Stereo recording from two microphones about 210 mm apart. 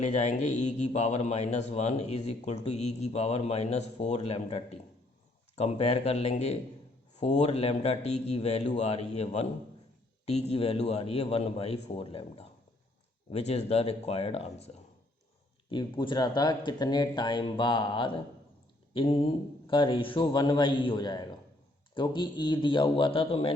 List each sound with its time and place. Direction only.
0.0 s a man's voice: 35° left (ahead or behind)